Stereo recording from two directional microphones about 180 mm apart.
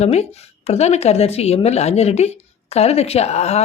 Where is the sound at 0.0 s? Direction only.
35° left (ahead or behind).